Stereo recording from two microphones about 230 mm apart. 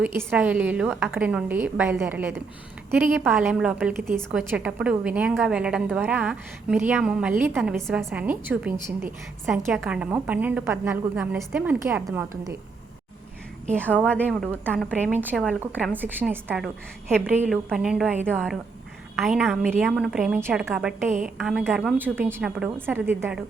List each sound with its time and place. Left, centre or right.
0.0 s a woman's voice: centre
13.9 s a woman's voice: centre
14.8 s a woman's voice: centre